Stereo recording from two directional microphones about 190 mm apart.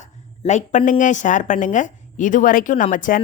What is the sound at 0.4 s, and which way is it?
Speech, 40° left (ahead or behind).